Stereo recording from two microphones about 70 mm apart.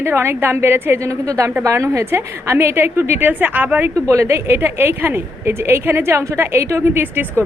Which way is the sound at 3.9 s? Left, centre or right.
Right.